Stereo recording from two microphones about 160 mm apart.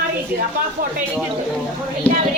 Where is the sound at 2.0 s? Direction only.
10° left (ahead or behind).